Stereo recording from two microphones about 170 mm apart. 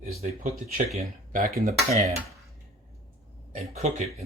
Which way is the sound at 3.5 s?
45° right (ahead or behind).